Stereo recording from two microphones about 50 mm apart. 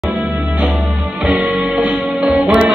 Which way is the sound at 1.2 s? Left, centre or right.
Right.